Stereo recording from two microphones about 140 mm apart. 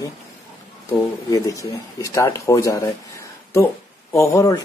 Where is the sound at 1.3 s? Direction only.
25° left (ahead or behind).